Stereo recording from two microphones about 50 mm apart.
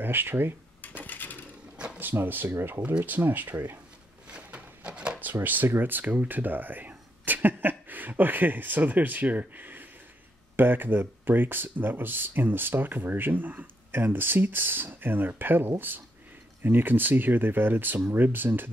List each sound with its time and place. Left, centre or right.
0.0 s speech: right
0.8 s a sound: left
2.0 s speech: right
2.5 s speech: right
2.8 s speech: right
3.1 s speech: right
4.3 s a sound: right
5.2 s speech: right